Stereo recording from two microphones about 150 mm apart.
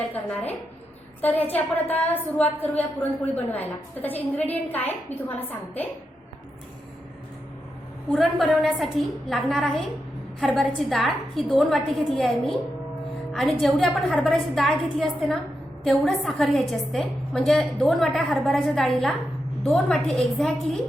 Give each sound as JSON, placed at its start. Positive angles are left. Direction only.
{"t": 0.0, "sound": "a woman's voice", "side_deg": 10}
{"t": 1.5, "sound": "a woman's voice", "side_deg": 10}
{"t": 8.1, "sound": "a woman's voice", "side_deg": 0}